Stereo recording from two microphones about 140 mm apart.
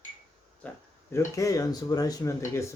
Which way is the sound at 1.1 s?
25° left (ahead or behind).